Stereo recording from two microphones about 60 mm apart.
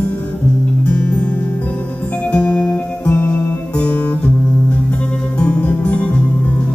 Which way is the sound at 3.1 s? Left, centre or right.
Left.